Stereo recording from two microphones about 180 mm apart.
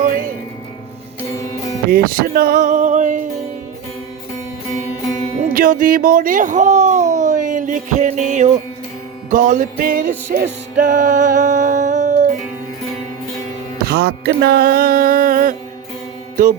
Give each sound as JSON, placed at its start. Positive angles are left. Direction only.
{"t": 0.0, "sound": "music", "side_deg": -50}
{"t": 1.9, "sound": "music", "side_deg": -55}
{"t": 5.4, "sound": "speech", "side_deg": -50}
{"t": 9.3, "sound": "music", "side_deg": -45}
{"t": 13.7, "sound": "music", "side_deg": -60}